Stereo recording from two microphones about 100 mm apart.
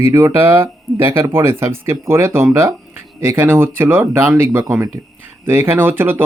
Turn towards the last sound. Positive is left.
turn(degrees=-20)  # may be behind; listen again after turning